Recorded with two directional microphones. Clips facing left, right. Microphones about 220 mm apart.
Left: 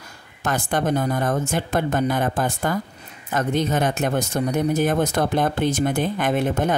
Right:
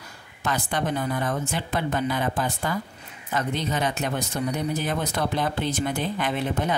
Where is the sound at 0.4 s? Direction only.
50° left (ahead or behind).